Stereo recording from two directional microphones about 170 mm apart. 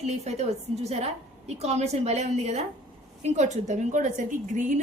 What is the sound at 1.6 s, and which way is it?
A woman's voice, 40° right (ahead or behind).